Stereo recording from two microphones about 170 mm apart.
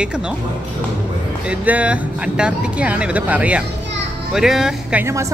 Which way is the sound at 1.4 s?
10° right (ahead or behind).